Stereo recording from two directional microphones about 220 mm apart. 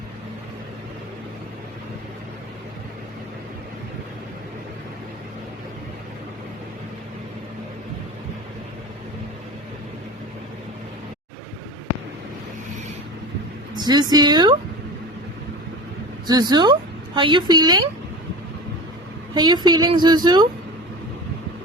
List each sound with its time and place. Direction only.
13.7 s a woman's voice: 20° right (ahead or behind)
16.2 s a woman's voice: 20° right (ahead or behind)
19.3 s a woman's voice: 20° right (ahead or behind)